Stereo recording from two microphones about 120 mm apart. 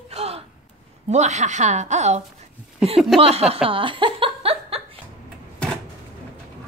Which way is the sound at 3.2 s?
55° right (ahead or behind).